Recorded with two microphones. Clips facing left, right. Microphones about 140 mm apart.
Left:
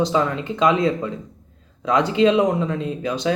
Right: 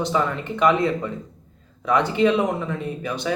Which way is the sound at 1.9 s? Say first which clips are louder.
Left 2 dB; 20° left (ahead or behind).